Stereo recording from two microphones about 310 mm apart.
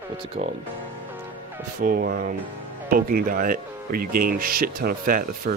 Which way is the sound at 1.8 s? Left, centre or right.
Right.